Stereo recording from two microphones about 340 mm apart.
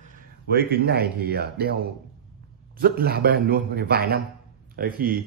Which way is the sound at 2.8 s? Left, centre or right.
Right.